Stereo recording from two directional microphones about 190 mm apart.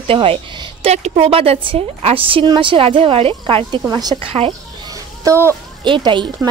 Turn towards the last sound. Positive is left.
turn(degrees=-25)  # may be behind; listen again after turning